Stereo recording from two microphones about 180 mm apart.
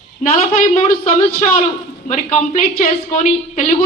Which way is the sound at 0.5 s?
50° left (ahead or behind).